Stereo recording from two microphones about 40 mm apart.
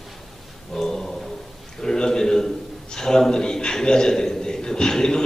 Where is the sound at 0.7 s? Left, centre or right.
Centre.